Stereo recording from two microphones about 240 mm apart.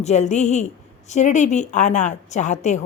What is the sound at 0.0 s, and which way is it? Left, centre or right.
A woman's voice, left.